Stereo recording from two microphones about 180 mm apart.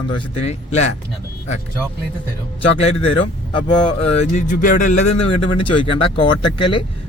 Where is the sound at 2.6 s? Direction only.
30° left (ahead or behind).